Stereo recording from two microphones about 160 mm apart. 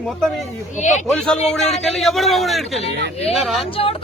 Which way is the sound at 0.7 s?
50° left (ahead or behind).